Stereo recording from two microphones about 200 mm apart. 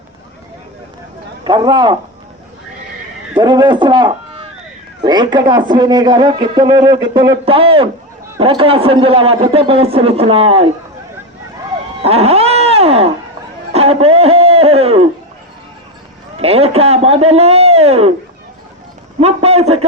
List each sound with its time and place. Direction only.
1.5 s a man's voice: 20° right (ahead or behind)
3.3 s a man's voice: 20° right (ahead or behind)
12.0 s dog: 30° right (ahead or behind)
13.7 s a sound: 30° right (ahead or behind)
16.4 s a man's voice: 30° right (ahead or behind)
19.2 s a man's voice: 30° right (ahead or behind)